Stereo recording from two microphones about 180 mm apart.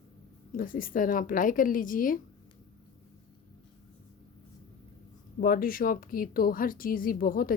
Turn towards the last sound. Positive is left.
turn(degrees=50)  # may be behind; listen again after turning